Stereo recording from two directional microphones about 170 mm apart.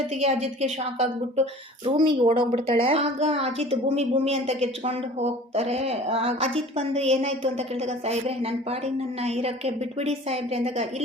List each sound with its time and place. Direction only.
0.1 s a woman's voice: 40° right (ahead or behind)